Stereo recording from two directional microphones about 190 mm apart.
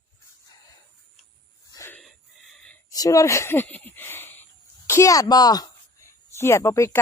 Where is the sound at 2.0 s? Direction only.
Centre (ahead or behind).